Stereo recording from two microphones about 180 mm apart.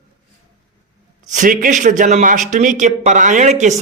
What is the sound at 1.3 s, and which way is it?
Speech, 45° right (ahead or behind).